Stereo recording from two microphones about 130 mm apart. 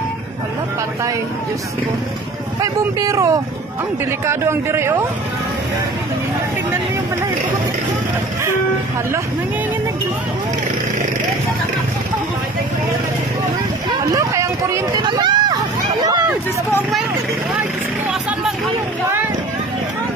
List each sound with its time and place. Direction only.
2.6 s speech: 25° right (ahead or behind)
14.1 s speech: 25° right (ahead or behind)
15.0 s hubbub: 35° right (ahead or behind)